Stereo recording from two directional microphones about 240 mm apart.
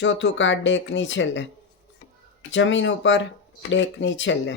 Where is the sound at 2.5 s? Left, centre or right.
Left.